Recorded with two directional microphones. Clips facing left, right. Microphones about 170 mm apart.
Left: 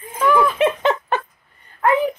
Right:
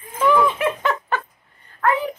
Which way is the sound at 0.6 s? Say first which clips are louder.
Left 4 dB; 20° left (ahead or behind).